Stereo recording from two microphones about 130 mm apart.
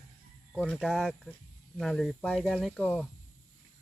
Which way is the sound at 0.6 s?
Centre (ahead or behind).